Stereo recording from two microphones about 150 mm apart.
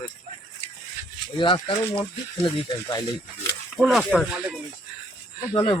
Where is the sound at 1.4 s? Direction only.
30° left (ahead or behind).